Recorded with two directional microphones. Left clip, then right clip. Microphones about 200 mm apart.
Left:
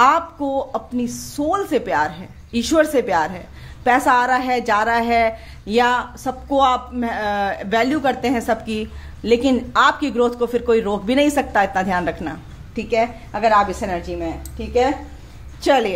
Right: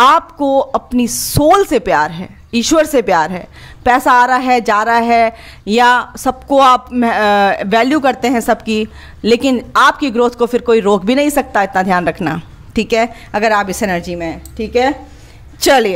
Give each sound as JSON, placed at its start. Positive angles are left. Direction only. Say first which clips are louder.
{"t": 0.0, "sound": "a woman's voice", "louder": "right 6 dB", "side_deg": -35}
{"t": 12.7, "sound": "a woman's voice", "louder": "right 5 dB", "side_deg": -50}